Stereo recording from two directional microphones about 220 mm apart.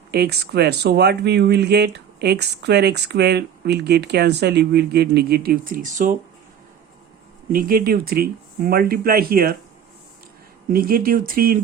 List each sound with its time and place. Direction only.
0.1 s speech: 45° right (ahead or behind)
7.5 s speech: 40° right (ahead or behind)
10.7 s speech: 40° right (ahead or behind)